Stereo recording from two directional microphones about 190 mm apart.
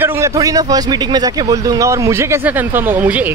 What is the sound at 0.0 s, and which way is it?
A man's voice, 15° right (ahead or behind).